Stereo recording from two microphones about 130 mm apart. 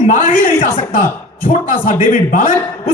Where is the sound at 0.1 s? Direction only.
90° left.